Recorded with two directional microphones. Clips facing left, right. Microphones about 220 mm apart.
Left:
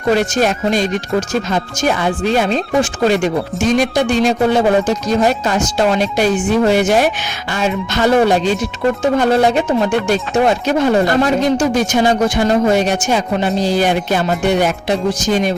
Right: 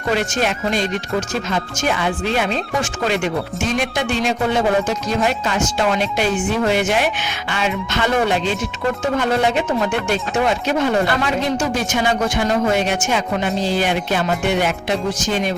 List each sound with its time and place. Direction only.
0.2 s speech: 40° left (ahead or behind)